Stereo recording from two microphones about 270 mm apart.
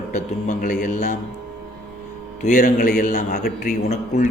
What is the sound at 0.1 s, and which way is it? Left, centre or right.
A man's voice, left.